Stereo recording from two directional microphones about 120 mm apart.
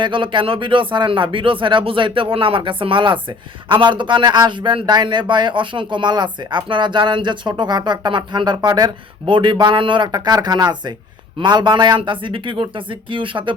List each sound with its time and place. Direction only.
0.0 s speech: 45° right (ahead or behind)